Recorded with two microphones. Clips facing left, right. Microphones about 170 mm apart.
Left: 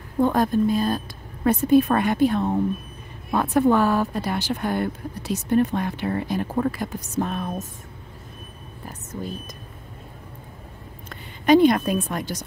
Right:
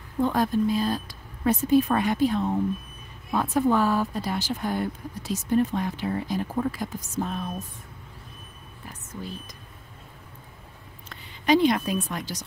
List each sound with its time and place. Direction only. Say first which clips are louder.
0.2 s a woman's voice: left 3 dB; 50° left (ahead or behind)
8.8 s whispering: left 5 dB; 40° left (ahead or behind)
11.1 s a woman's voice: left 5 dB; 50° left (ahead or behind)